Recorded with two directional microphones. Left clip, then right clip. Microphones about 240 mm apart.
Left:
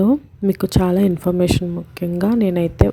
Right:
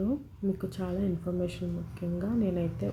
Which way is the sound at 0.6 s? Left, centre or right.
Left.